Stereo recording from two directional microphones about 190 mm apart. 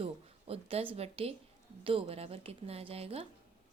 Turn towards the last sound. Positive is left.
turn(degrees=-30)  # may be behind; listen again after turning